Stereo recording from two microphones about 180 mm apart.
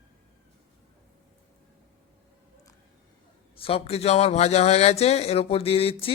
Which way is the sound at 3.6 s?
30° left (ahead or behind).